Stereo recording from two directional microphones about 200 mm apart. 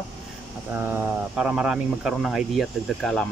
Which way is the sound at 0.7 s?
10° right (ahead or behind).